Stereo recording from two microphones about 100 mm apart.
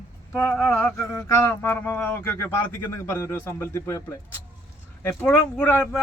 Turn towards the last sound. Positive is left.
turn(degrees=20)  # may be behind; listen again after turning